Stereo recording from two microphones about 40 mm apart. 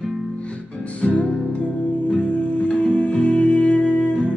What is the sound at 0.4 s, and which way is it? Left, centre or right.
Music, left.